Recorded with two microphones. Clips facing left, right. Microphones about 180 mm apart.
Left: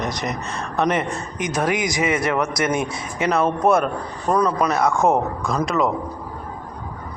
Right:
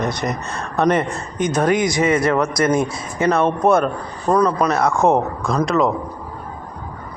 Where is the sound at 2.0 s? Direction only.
35° right (ahead or behind).